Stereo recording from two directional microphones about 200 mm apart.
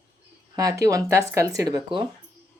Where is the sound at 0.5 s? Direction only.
15° right (ahead or behind).